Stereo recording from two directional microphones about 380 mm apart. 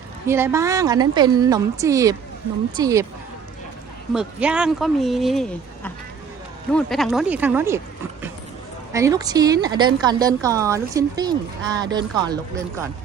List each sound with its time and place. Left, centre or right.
0.3 s a woman's voice: centre
4.1 s speech: centre
8.9 s a woman's voice: centre